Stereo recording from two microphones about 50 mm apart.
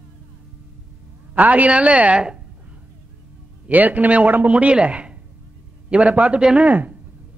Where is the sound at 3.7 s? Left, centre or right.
Right.